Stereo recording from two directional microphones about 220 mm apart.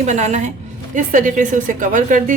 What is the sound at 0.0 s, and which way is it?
A woman's voice, 30° right (ahead or behind).